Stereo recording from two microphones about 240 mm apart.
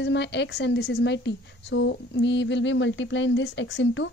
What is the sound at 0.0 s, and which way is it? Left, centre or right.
A woman's voice, left.